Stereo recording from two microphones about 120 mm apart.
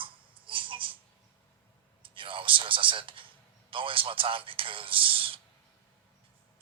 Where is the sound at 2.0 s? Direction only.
45° right (ahead or behind).